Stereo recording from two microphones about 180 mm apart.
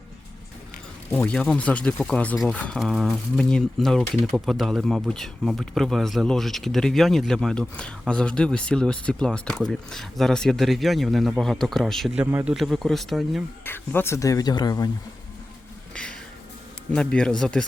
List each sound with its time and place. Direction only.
1.1 s speech: 5° left (ahead or behind); by 12.5 s 10° right (ahead or behind)
12.5 s speech: centre (ahead or behind)
13.7 s speech: 10° left (ahead or behind)
16.9 s speech: 5° left (ahead or behind)